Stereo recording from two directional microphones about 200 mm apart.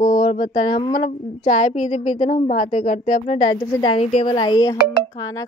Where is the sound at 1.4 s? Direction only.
40° left (ahead or behind).